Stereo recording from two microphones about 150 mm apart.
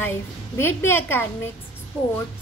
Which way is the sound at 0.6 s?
15° left (ahead or behind).